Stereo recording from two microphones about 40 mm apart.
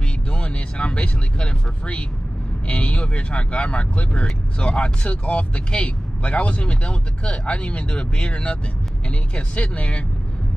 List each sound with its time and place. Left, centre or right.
0.3 s speech: left